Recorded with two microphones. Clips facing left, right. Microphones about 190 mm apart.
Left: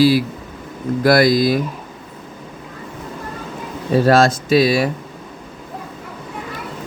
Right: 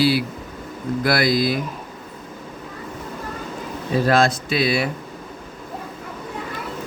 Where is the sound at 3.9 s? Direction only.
40° left (ahead or behind).